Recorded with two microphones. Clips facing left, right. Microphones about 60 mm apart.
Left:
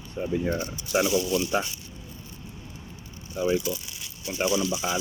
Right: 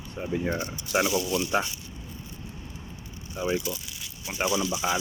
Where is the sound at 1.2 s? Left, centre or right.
Centre.